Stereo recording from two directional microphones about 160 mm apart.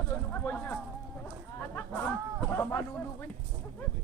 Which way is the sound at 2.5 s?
10° left (ahead or behind).